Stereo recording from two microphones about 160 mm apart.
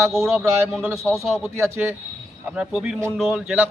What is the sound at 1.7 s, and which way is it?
A man's voice, 15° right (ahead or behind).